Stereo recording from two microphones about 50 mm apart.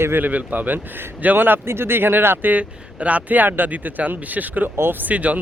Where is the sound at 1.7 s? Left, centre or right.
Right.